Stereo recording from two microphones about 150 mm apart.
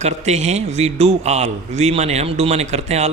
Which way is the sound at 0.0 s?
50° right (ahead or behind).